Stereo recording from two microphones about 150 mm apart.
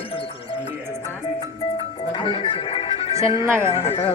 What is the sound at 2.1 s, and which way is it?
Speech, 35° left (ahead or behind).